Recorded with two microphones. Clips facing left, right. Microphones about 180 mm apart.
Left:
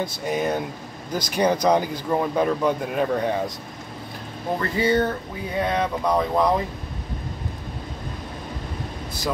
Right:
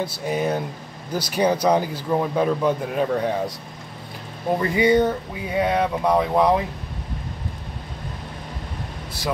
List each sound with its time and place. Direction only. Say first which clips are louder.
0.0 s speech: right 1 dB; 5° right (ahead or behind)
4.6 s speech: right 3 dB; 15° right (ahead or behind)